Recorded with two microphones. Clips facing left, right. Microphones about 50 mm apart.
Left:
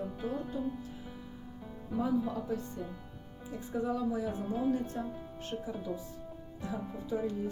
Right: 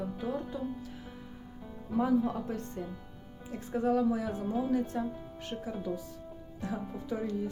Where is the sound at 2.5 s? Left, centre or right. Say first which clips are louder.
Left 1 dB; right.